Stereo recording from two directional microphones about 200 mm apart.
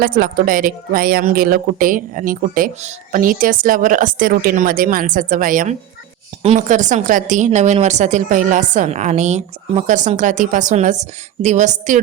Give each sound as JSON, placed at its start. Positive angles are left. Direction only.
{"t": 0.0, "sound": "a woman's voice", "side_deg": -45}